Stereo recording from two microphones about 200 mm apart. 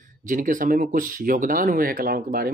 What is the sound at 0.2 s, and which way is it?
Speech, 40° right (ahead or behind).